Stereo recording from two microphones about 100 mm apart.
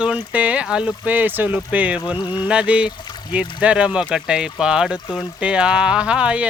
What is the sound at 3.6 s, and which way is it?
Speech, 10° right (ahead or behind).